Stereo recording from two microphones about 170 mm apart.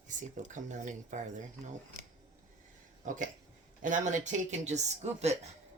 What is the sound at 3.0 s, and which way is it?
Speech, 50° right (ahead or behind).